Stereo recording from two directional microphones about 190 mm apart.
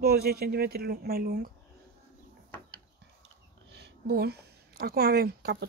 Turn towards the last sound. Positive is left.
turn(degrees=-60)  # may be behind; listen again after turning